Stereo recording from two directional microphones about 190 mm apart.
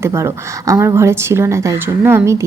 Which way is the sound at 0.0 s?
15° right (ahead or behind).